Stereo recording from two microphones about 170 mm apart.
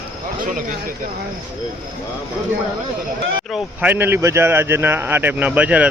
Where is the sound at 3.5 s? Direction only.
10° right (ahead or behind).